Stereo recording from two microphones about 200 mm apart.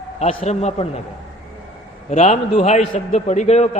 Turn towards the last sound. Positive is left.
turn(degrees=35)  # may be behind; listen again after turning